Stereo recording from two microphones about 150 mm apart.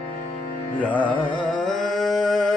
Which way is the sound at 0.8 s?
10° left (ahead or behind).